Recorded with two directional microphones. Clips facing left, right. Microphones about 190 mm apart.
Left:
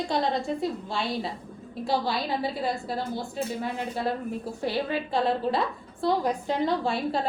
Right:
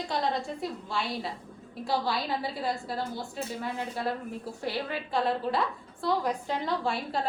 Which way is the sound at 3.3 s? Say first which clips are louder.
Left 4 dB; 25° left (ahead or behind).